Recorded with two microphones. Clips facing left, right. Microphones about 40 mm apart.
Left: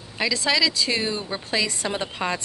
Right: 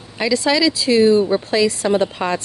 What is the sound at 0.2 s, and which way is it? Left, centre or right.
Speech, centre.